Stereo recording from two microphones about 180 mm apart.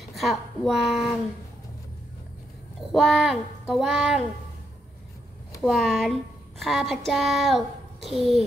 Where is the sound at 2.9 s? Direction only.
Centre (ahead or behind).